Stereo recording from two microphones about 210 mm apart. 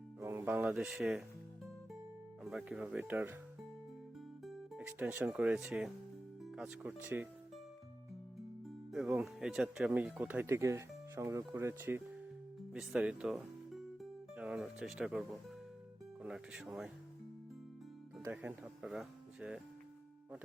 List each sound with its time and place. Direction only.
0.2 s speech: 10° right (ahead or behind)
2.4 s speech: centre (ahead or behind)
4.4 s speech: 5° right (ahead or behind)
8.9 s speech: 5° right (ahead or behind)
18.2 s speech: 10° right (ahead or behind)